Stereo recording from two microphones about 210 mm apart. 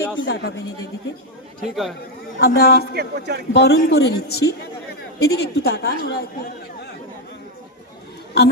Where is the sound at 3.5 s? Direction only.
50° left (ahead or behind).